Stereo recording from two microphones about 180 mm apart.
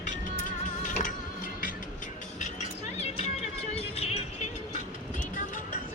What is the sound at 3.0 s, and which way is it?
Vehicle, 35° left (ahead or behind).